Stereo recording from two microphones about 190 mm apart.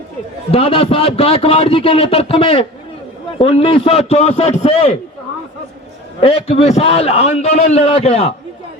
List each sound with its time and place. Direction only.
0.5 s a man's voice: 30° left (ahead or behind)
6.1 s a man's voice: 30° left (ahead or behind)